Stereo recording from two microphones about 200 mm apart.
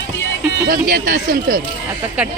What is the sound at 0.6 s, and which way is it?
Speech, 45° right (ahead or behind).